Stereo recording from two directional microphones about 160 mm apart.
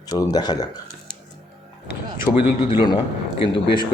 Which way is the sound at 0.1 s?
25° left (ahead or behind).